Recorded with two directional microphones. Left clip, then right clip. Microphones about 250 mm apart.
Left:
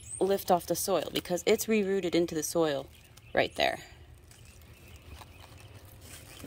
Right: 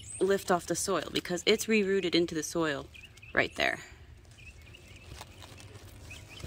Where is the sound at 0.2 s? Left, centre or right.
Centre.